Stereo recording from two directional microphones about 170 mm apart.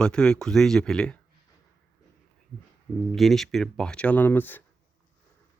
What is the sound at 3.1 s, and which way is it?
Speech, centre (ahead or behind).